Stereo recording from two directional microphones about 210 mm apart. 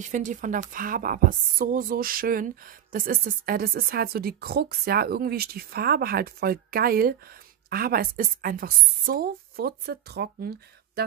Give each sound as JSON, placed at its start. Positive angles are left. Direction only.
{"t": 0.0, "sound": "a woman's voice", "side_deg": -35}